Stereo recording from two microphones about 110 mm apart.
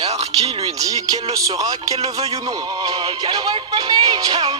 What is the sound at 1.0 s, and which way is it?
Speech, 35° right (ahead or behind).